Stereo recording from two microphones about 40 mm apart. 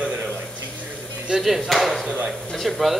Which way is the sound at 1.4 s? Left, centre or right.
Centre.